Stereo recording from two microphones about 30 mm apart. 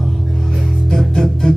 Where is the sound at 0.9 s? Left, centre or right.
Centre.